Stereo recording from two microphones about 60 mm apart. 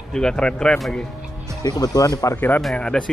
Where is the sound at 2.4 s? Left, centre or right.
Left.